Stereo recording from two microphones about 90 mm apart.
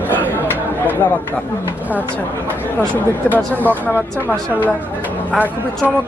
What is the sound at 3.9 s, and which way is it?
Speech, 20° right (ahead or behind).